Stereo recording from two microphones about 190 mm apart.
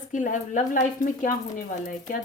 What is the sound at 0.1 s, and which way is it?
Speech, 40° left (ahead or behind).